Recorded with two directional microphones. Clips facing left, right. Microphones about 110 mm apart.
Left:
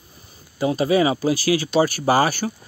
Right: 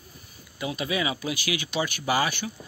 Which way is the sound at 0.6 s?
35° left (ahead or behind).